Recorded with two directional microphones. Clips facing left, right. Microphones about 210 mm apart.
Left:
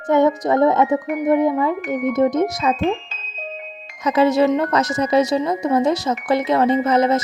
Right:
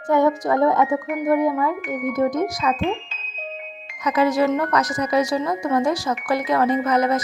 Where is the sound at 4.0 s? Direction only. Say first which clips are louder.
Left 3 dB; 25° left (ahead or behind).